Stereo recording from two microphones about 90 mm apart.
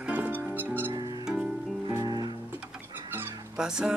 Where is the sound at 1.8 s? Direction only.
50° right (ahead or behind).